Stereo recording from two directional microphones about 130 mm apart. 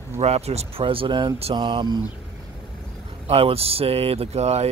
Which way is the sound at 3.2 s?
50° right (ahead or behind).